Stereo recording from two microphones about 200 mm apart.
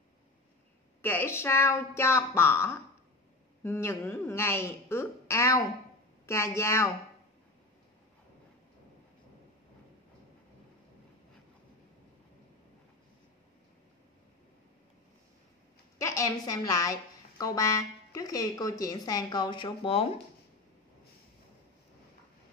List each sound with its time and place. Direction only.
1.0 s speech: 10° left (ahead or behind)
16.0 s a woman's voice: 15° left (ahead or behind)